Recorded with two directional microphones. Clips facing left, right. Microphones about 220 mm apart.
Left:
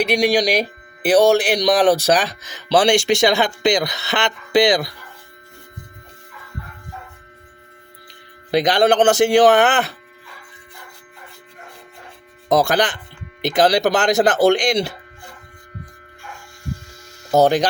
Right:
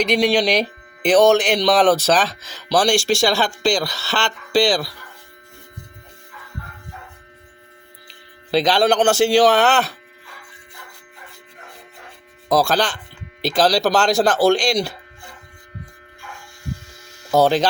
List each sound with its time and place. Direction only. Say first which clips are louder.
0.0 s speech: even; 10° left (ahead or behind)
8.4 s a man's voice: even; 15° left (ahead or behind)
8.7 s a man's voice: left 2 dB; 50° left (ahead or behind)
9.0 s speech: left 2 dB; 20° left (ahead or behind)
12.5 s speech: left 1 dB; 20° left (ahead or behind)
17.3 s a man's voice: left 1 dB; 45° left (ahead or behind)